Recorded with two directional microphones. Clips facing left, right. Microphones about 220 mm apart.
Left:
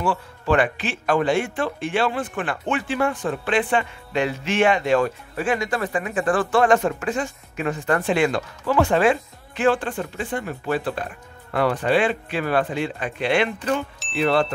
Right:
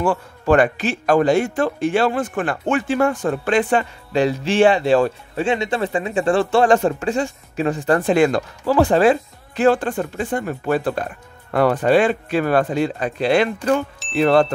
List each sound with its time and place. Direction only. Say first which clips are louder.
0.0 s speech: right 4 dB; 45° right (ahead or behind)